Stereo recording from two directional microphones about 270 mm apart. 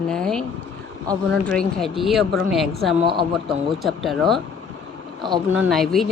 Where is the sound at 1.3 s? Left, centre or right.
Centre.